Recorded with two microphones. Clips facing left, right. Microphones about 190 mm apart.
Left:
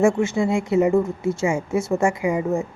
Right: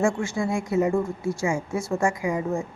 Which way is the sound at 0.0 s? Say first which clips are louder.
Left 6 dB; 20° left (ahead or behind).